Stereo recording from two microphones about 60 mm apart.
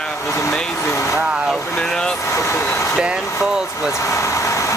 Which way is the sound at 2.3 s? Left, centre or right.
Left.